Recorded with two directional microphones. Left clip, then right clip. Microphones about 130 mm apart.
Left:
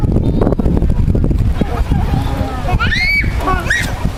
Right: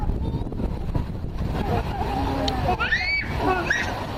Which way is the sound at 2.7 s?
25° left (ahead or behind).